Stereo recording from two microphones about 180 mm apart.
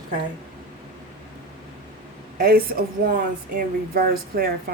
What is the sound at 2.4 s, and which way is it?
Speech, 55° right (ahead or behind).